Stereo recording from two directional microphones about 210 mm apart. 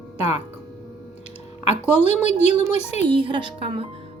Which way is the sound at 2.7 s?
30° left (ahead or behind).